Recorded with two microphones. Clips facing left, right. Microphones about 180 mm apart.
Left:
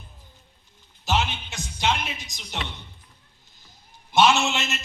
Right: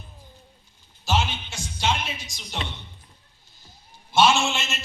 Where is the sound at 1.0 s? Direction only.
20° left (ahead or behind).